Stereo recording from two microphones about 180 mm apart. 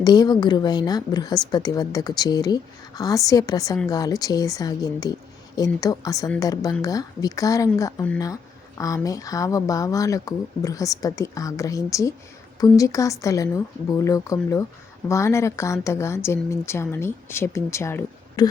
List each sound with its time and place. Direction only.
0.0 s a woman's voice: 20° left (ahead or behind)